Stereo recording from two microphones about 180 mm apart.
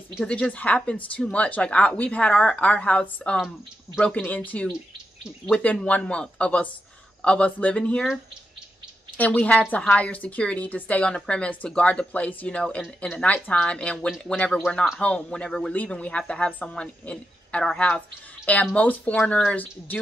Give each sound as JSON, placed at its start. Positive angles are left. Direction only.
{"t": 0.1, "sound": "a woman's voice", "side_deg": 5}
{"t": 4.1, "sound": "a woman's voice", "side_deg": 10}